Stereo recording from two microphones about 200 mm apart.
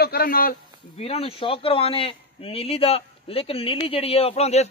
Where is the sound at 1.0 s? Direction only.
30° left (ahead or behind).